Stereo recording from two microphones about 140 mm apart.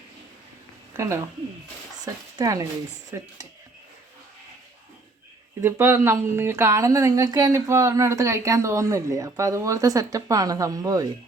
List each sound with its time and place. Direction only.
0.9 s speech: 20° right (ahead or behind)
2.4 s a woman's voice: 25° right (ahead or behind)
5.6 s a woman's voice: 20° right (ahead or behind)